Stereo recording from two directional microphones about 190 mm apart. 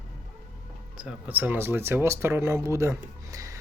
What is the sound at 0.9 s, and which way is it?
Speech, 5° right (ahead or behind).